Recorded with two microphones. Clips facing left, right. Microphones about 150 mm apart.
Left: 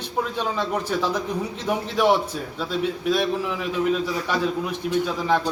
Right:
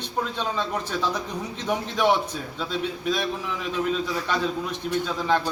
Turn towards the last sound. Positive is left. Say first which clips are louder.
# left 2 dB
turn(degrees=5)  # may be behind; listen again after turning